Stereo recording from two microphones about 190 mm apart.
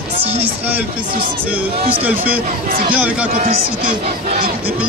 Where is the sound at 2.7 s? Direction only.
50° right (ahead or behind).